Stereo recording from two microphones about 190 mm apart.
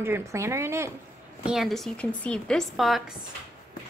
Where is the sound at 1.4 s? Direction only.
Centre (ahead or behind).